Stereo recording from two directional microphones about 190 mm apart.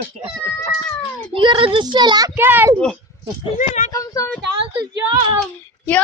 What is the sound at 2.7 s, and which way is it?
Speech, 5° left (ahead or behind).